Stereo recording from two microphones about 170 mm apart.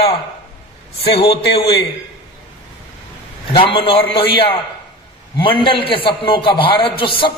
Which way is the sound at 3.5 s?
30° left (ahead or behind).